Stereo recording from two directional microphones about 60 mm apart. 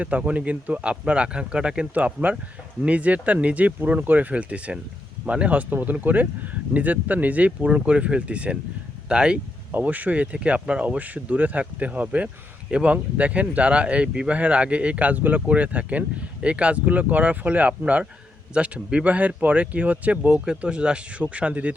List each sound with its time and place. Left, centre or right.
0.0 s speech: right
9.7 s speech: right